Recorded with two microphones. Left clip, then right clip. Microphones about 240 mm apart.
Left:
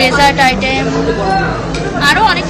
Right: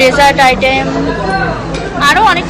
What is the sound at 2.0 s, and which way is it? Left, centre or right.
Speech, centre.